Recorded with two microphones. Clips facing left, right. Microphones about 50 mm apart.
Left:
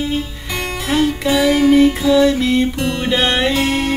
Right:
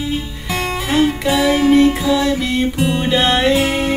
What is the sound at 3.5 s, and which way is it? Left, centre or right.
Music, centre.